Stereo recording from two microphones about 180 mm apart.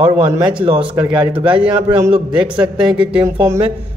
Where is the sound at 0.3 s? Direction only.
25° right (ahead or behind).